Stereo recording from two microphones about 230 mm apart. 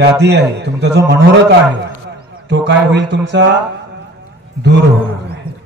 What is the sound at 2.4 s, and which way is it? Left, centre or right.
A man's voice, right.